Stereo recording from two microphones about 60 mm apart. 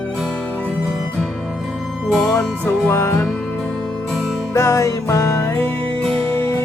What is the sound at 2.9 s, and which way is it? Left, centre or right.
Music, left.